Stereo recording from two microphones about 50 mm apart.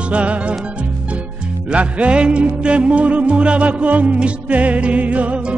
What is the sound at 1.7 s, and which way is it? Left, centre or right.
Music, right.